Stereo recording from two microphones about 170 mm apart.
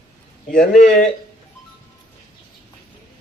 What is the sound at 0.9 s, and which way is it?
Speech, 5° left (ahead or behind).